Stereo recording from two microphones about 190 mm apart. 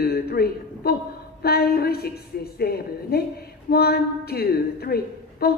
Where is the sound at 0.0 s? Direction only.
55° left (ahead or behind).